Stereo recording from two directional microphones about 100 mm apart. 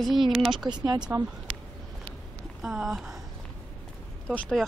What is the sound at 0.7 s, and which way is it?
Speech, 45° right (ahead or behind).